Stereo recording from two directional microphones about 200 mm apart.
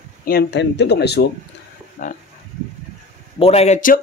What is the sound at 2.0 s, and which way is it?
Speech, 40° left (ahead or behind).